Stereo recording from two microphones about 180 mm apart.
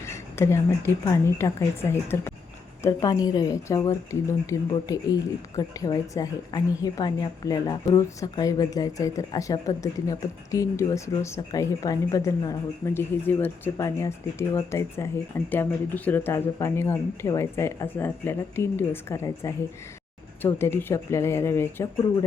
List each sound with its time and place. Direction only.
0.0 s a woman's voice: 15° left (ahead or behind)